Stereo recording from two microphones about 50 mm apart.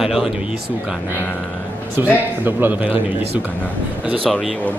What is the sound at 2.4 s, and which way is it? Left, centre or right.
Speech, right.